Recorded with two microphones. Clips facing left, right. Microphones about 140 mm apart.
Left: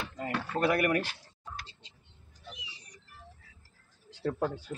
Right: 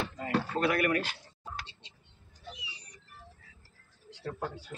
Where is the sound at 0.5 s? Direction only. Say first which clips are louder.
Left 2 dB; 10° left (ahead or behind).